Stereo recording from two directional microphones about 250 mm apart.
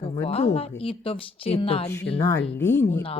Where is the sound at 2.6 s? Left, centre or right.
Centre.